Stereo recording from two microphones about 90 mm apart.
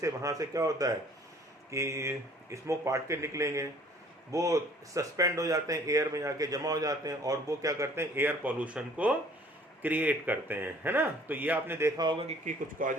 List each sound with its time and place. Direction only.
0.0 s speech: 40° right (ahead or behind); by 11.9 s 20° right (ahead or behind)